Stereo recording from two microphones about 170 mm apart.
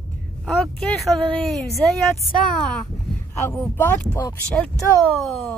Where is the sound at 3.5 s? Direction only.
10° left (ahead or behind).